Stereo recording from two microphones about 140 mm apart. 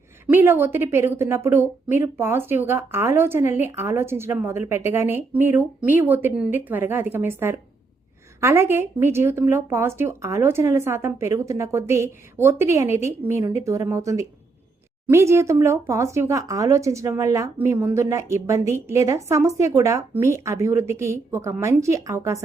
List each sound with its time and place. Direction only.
0.3 s speech: 15° right (ahead or behind)